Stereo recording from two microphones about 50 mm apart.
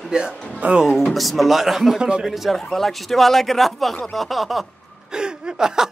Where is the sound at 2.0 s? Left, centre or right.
Centre.